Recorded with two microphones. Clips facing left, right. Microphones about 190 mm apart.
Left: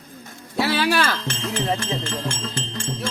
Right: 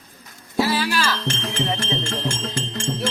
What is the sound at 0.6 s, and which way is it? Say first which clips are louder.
Music: left 1 dB; 65° left (ahead or behind).